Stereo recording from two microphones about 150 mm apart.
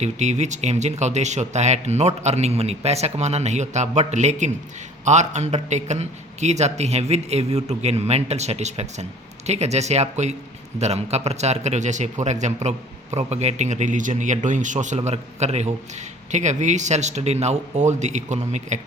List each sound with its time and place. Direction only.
0.0 s a man's voice: 50° right (ahead or behind)